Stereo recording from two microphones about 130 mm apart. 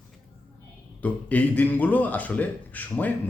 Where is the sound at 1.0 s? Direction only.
10° left (ahead or behind).